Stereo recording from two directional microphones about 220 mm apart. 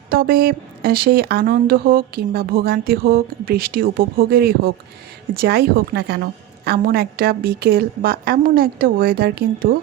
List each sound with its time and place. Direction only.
0.1 s speech: 40° right (ahead or behind)